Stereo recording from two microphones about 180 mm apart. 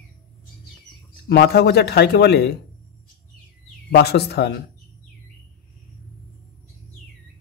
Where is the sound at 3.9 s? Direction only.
60° left (ahead or behind).